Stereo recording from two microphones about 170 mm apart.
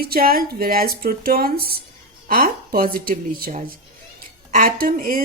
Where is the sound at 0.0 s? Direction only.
60° right (ahead or behind).